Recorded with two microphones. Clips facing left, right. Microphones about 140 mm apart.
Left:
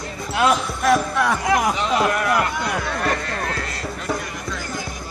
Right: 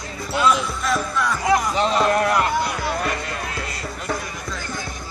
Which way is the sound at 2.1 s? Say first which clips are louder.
Right 2 dB; 30° right (ahead or behind).